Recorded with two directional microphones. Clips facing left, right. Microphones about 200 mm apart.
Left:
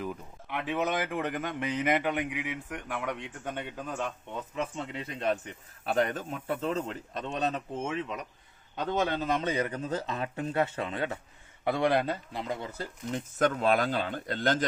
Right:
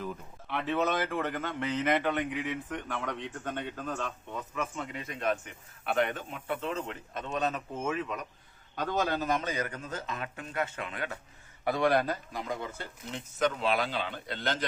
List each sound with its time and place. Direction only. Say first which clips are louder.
0.0 s speech: left 2 dB; 15° left (ahead or behind)
4.5 s a man's voice: left 2 dB; 30° left (ahead or behind)
12.7 s speech: left 6 dB; 40° left (ahead or behind)